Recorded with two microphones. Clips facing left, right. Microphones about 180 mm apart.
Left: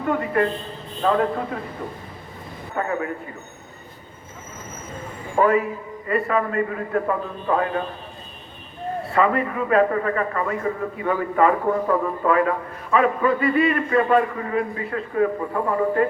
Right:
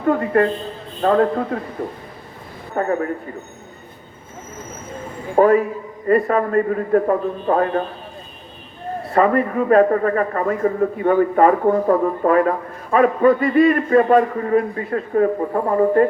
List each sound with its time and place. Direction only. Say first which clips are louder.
0.1 s a man's voice: right 5 dB; 40° right (ahead or behind)
2.7 s a man's voice: right 5 dB; 40° right (ahead or behind)
5.4 s a man's voice: right 5 dB; 40° right (ahead or behind)
9.0 s a man's voice: right 5 dB; 40° right (ahead or behind)